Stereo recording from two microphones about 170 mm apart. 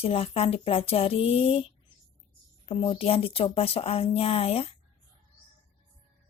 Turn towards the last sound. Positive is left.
turn(degrees=35)  # may be behind; listen again after turning